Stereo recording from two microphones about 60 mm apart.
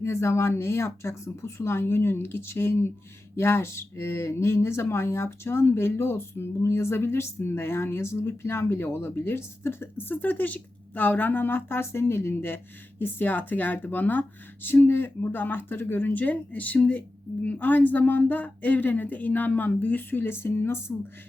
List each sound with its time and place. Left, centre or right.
0.0 s speech: left